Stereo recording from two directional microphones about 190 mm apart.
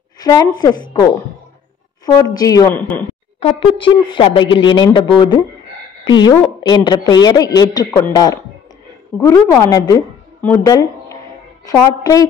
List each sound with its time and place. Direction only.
0.2 s a woman's voice: 20° left (ahead or behind)
3.3 s a woman's voice: 30° left (ahead or behind)